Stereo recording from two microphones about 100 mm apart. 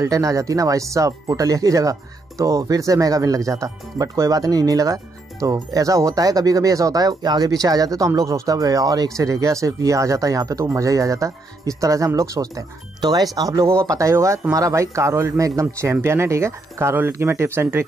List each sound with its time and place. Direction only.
0.0 s speech: 35° right (ahead or behind)